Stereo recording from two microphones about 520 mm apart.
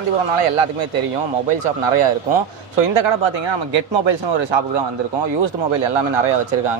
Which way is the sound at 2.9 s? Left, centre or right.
Right.